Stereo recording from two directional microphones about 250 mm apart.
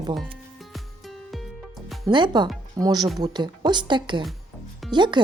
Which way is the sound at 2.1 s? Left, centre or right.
Centre.